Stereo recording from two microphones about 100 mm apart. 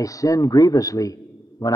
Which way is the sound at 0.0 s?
35° left (ahead or behind).